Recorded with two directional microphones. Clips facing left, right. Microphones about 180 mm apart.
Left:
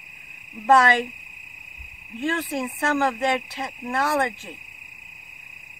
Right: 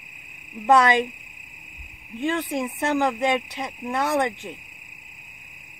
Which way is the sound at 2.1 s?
15° right (ahead or behind).